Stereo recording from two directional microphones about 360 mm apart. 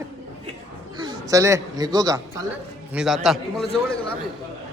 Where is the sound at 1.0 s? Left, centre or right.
Centre.